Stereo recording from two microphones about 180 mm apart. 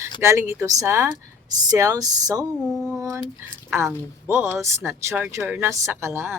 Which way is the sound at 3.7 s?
15° right (ahead or behind).